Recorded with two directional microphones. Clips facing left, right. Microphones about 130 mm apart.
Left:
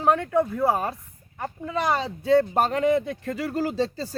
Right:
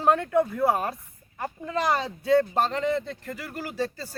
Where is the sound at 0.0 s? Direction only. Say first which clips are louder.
Left 1 dB; 15° left (ahead or behind).